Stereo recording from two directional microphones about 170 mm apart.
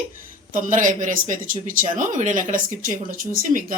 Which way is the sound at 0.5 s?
50° right (ahead or behind).